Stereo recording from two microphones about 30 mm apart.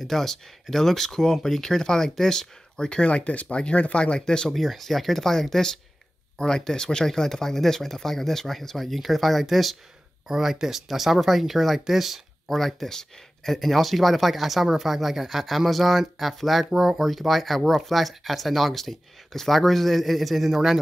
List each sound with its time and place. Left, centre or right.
0.0 s speech: centre
3.0 s speech: left
4.6 s speech: centre
6.3 s speech: left; by 9.8 s centre
10.2 s speech: centre
12.5 s speech: centre